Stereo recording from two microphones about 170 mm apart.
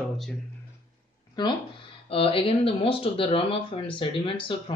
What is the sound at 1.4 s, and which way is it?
Speech, 25° left (ahead or behind).